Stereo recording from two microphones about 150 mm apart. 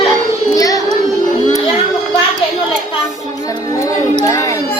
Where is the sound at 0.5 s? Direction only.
25° left (ahead or behind).